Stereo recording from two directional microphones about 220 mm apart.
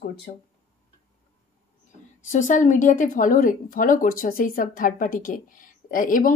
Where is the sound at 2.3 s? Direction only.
35° left (ahead or behind).